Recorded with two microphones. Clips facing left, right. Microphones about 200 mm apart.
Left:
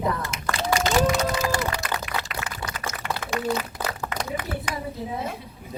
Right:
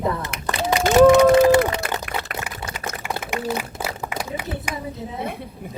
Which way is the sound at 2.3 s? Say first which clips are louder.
Right 2 dB; 25° right (ahead or behind).